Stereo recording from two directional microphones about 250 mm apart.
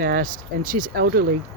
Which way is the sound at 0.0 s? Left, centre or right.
Right.